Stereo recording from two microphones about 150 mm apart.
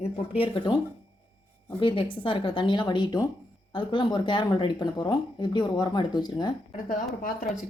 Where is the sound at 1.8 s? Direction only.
35° left (ahead or behind).